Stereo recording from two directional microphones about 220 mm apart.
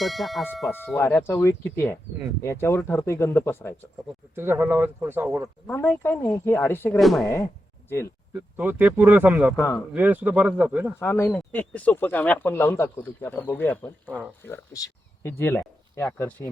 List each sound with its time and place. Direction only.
0.0 s speech: centre (ahead or behind)
4.4 s speech: 10° right (ahead or behind)
5.6 s speech: 10° left (ahead or behind)
8.3 s speech: 10° right (ahead or behind)
11.0 s speech: 10° left (ahead or behind)